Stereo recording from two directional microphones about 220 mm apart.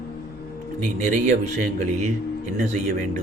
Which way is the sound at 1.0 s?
35° right (ahead or behind).